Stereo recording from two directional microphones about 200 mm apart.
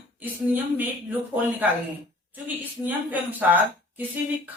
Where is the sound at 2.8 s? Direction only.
10° right (ahead or behind).